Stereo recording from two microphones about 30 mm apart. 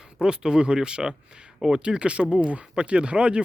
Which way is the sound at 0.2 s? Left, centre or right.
Right.